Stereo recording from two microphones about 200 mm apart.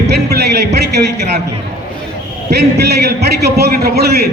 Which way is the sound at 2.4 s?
55° right (ahead or behind).